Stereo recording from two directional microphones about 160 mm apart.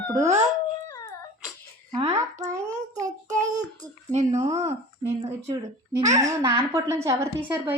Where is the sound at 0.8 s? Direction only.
20° left (ahead or behind).